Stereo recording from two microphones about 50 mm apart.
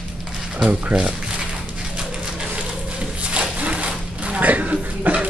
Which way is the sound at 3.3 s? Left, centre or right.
Right.